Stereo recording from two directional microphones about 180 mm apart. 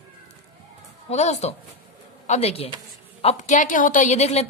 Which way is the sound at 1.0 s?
40° left (ahead or behind).